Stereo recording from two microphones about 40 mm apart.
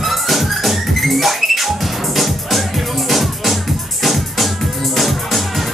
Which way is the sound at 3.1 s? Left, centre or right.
Centre.